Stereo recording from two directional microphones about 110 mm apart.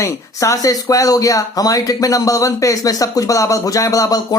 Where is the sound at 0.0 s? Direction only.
30° left (ahead or behind).